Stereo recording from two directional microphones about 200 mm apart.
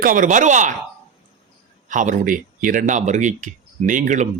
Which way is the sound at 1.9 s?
40° right (ahead or behind).